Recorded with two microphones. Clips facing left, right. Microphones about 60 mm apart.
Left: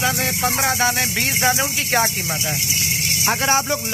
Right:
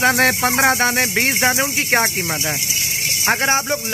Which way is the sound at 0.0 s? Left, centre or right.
Right.